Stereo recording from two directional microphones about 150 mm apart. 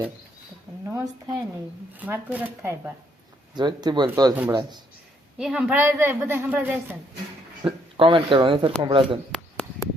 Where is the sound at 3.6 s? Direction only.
30° right (ahead or behind).